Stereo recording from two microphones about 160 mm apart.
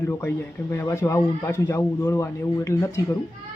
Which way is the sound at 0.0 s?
15° left (ahead or behind).